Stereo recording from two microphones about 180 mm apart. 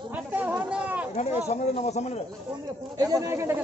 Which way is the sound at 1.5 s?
40° left (ahead or behind).